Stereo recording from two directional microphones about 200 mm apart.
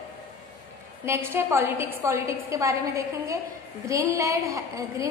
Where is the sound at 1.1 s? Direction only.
10° right (ahead or behind).